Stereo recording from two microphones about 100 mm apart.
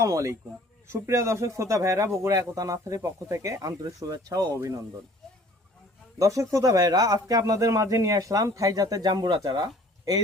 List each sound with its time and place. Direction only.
0.0 s speech: 30° right (ahead or behind)
6.1 s speech: 30° right (ahead or behind)